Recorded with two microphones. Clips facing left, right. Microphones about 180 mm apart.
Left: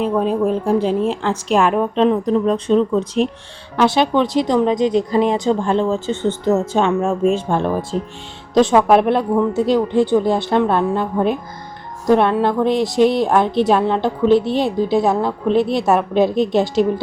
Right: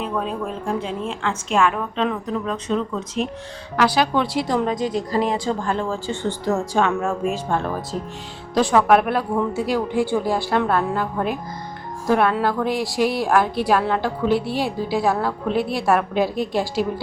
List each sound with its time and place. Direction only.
0.8 s a woman's voice: centre (ahead or behind)
1.2 s a woman's voice: 35° left (ahead or behind)
16.0 s a woman's voice: 5° right (ahead or behind)
16.3 s a woman's voice: 25° left (ahead or behind)